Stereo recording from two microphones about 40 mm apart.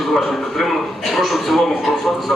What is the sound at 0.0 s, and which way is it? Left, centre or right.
A man's voice, centre.